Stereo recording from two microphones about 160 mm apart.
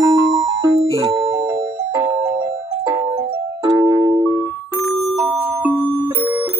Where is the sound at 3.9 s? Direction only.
25° right (ahead or behind).